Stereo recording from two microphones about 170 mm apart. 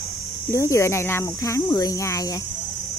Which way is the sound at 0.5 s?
15° left (ahead or behind).